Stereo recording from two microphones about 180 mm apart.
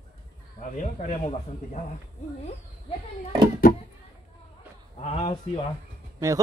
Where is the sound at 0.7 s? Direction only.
45° left (ahead or behind).